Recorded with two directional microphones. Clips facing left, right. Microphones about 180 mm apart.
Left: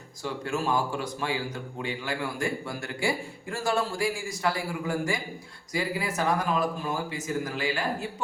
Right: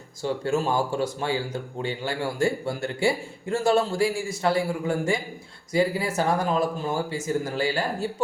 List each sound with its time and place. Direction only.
0.2 s a man's voice: 30° right (ahead or behind)